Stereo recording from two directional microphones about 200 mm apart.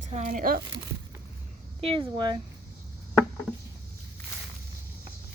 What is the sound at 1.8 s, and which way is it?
Speech, 25° right (ahead or behind).